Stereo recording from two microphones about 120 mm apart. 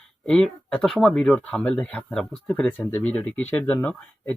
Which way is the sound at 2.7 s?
15° left (ahead or behind).